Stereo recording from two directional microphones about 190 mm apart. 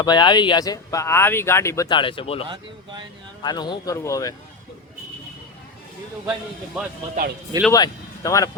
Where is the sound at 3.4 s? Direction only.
20° left (ahead or behind).